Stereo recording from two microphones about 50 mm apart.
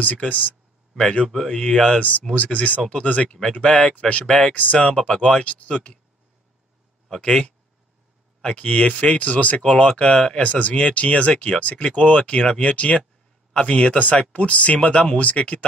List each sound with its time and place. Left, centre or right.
0.0 s speech: left
1.3 s speech: centre
1.6 s speech: centre
2.0 s speech: left
7.2 s speech: left